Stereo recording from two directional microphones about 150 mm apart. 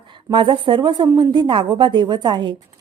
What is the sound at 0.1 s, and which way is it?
A woman's voice, 35° right (ahead or behind).